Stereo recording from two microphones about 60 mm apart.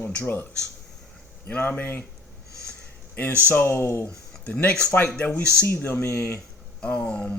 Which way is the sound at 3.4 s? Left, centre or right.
Left.